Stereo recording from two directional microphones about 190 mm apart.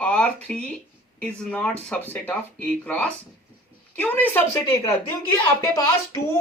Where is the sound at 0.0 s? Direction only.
5° left (ahead or behind).